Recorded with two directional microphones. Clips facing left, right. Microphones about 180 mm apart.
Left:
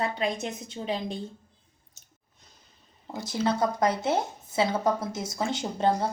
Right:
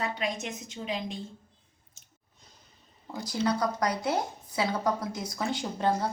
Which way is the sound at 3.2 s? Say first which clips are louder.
Left 2 dB; 25° left (ahead or behind).